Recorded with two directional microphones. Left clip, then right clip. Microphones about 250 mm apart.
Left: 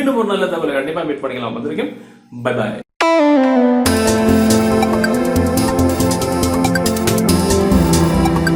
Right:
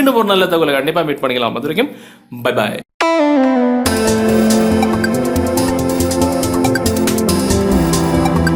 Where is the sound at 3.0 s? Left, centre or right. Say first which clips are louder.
Left 1 dB; centre.